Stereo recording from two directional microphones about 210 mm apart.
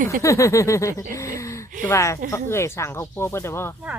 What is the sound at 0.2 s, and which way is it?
Speech, 15° left (ahead or behind).